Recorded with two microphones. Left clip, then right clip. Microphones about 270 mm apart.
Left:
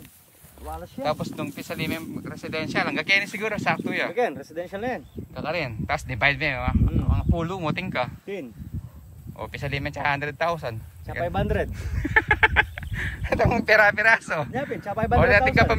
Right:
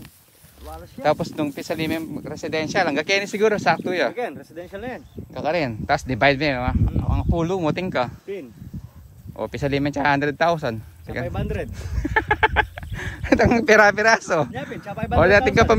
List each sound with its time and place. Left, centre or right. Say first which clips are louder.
1.0 s speech: right 7 dB; right
4.1 s speech: left 3 dB; left
5.3 s speech: right 6 dB; centre
9.5 s speech: right 7 dB; centre
11.2 s speech: left 7 dB; centre
11.9 s speech: even; centre
14.5 s speech: left 3 dB; centre
15.1 s speech: right 3 dB; centre